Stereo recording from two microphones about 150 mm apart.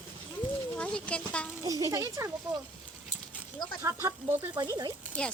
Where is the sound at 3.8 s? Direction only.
20° right (ahead or behind).